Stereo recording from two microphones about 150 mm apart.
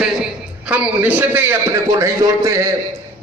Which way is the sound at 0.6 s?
10° right (ahead or behind).